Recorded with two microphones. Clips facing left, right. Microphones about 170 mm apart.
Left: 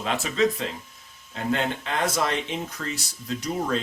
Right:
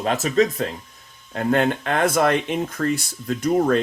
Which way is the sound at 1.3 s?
55° right (ahead or behind).